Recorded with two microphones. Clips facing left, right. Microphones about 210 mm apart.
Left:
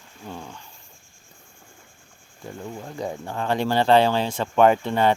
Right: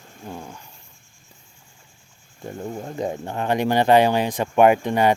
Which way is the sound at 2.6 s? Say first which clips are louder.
Right 5 dB; 40° right (ahead or behind).